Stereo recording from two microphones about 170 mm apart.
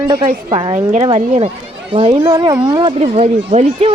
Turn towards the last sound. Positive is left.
turn(degrees=-35)  # may be behind; listen again after turning